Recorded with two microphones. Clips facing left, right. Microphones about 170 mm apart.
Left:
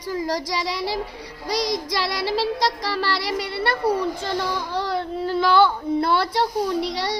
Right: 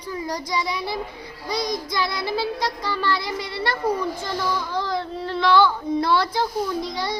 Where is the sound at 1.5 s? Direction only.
90° left; by 3.8 s 65° left (ahead or behind).